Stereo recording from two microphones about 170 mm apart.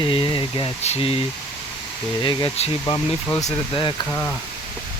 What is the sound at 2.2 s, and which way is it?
Speech, 25° left (ahead or behind).